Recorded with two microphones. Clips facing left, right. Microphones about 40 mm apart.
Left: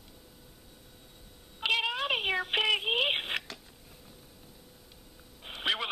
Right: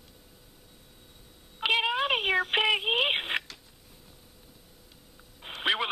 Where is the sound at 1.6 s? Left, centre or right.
Centre.